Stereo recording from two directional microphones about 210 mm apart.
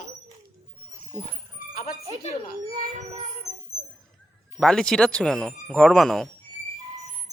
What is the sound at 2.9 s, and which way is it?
Child singing, 30° right (ahead or behind).